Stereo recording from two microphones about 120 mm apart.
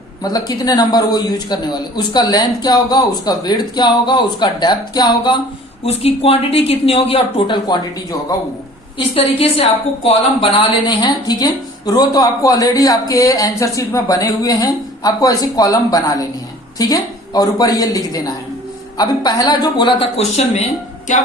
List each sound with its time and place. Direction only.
0.2 s a woman's voice: 30° left (ahead or behind)
5.8 s speech: 55° left (ahead or behind)
9.0 s a woman's voice: 50° left (ahead or behind)
20.1 s speech: 65° left (ahead or behind)